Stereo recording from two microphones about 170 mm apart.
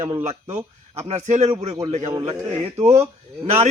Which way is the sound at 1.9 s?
40° right (ahead or behind).